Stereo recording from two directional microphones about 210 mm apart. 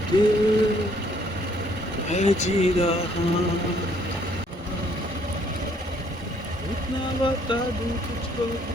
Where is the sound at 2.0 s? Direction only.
35° left (ahead or behind).